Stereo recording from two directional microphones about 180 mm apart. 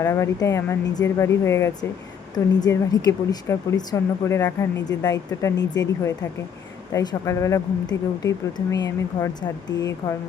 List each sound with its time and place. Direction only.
0.0 s speech: 15° left (ahead or behind)